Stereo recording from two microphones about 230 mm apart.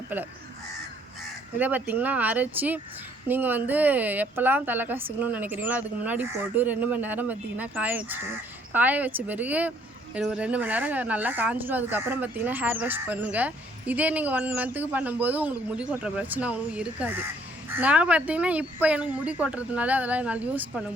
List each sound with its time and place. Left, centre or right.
1.5 s speech: centre